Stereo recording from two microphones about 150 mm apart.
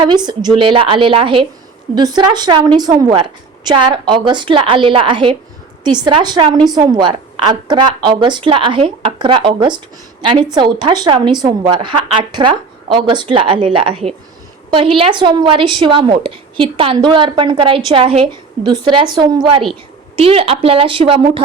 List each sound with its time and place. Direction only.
0.0 s a woman's voice: 30° right (ahead or behind)